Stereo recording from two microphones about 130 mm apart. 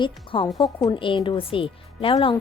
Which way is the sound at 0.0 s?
40° left (ahead or behind).